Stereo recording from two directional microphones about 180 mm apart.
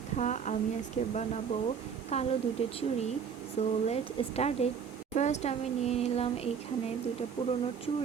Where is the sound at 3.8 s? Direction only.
35° left (ahead or behind).